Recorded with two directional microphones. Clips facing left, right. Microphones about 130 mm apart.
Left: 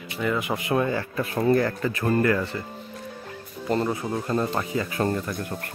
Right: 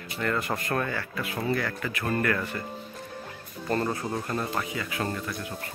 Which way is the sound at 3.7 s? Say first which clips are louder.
Left 3 dB; 15° left (ahead or behind).